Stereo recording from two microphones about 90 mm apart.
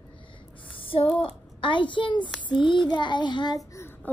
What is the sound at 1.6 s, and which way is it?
A child's voice, 65° left (ahead or behind).